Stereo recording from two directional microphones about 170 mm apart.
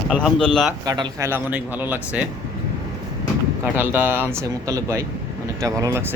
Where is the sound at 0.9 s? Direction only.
20° right (ahead or behind).